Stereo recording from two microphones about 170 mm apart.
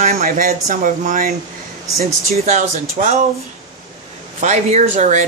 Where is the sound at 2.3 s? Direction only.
40° right (ahead or behind).